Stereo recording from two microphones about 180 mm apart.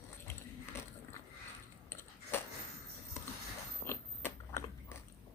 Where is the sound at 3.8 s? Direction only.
15° left (ahead or behind).